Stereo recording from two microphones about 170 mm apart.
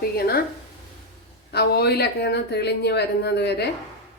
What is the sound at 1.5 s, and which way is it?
Speech, 70° left (ahead or behind).